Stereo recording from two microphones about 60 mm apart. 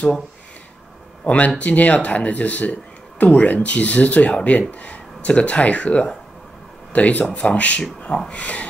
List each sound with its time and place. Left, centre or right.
1.2 s speech: left